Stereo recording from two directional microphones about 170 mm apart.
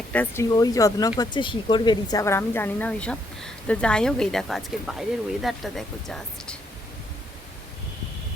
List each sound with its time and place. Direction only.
0.1 s speech: 10° left (ahead or behind)
0.5 s a woman's voice: 20° left (ahead or behind); by 6.6 s centre (ahead or behind)